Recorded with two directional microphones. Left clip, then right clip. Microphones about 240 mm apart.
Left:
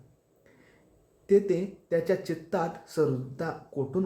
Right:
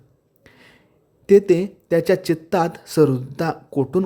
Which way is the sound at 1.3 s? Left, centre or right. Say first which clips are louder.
Right 10 dB; right.